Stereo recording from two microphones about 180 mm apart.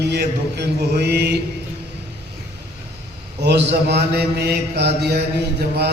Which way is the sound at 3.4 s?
70° right (ahead or behind).